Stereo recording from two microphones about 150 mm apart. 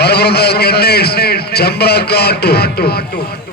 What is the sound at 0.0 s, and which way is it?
A man's voice, 90° left.